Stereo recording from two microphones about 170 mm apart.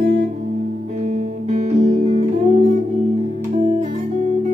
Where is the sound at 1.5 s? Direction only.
40° right (ahead or behind).